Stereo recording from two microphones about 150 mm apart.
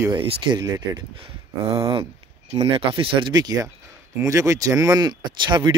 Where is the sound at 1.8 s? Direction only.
35° right (ahead or behind).